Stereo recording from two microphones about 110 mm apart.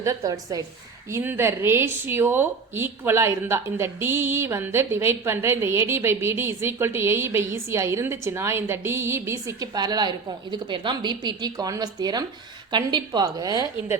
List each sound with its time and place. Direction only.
0.0 s a woman's voice: 30° right (ahead or behind)
1.1 s a woman's voice: 20° right (ahead or behind)
9.7 s a woman's voice: 40° right (ahead or behind)